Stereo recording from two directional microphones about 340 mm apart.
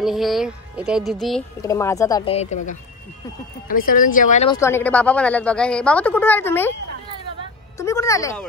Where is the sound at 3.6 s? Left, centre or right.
Left.